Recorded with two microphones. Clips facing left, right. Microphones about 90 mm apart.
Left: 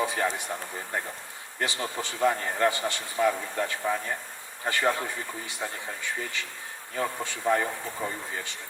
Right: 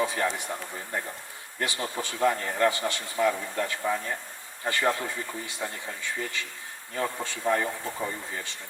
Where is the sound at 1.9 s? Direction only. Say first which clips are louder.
Even; 20° left (ahead or behind).